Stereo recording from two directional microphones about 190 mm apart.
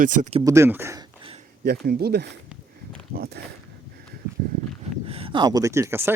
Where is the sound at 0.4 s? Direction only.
15° right (ahead or behind).